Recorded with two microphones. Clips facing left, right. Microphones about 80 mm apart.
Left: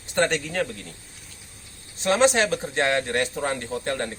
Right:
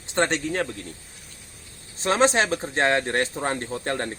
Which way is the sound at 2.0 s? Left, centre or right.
Right.